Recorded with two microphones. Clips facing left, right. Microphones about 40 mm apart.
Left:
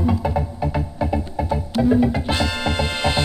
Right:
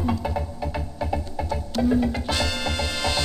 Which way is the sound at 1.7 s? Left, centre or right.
Left.